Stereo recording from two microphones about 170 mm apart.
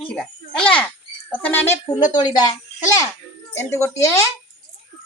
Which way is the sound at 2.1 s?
25° left (ahead or behind).